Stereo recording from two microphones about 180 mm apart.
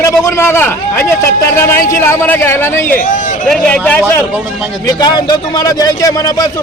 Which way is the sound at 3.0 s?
45° left (ahead or behind).